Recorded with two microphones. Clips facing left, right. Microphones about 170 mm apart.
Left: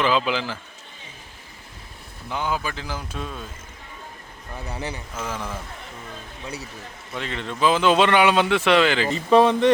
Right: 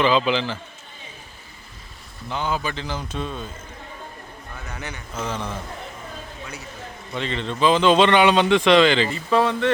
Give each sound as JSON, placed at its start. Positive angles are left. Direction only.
{"t": 0.0, "sound": "a man's voice", "side_deg": 5}
{"t": 2.3, "sound": "a man's voice", "side_deg": 10}
{"t": 4.5, "sound": "a man's voice", "side_deg": 30}
{"t": 5.1, "sound": "a man's voice", "side_deg": 5}
{"t": 7.1, "sound": "a man's voice", "side_deg": 5}
{"t": 9.0, "sound": "speech", "side_deg": 20}